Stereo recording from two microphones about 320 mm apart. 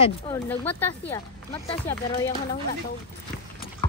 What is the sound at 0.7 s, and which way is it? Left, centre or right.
Speech, centre.